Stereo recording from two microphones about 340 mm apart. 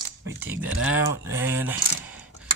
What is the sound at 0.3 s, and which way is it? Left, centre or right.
Speech, centre.